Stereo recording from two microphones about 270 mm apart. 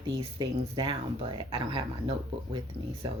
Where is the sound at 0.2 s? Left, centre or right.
Centre.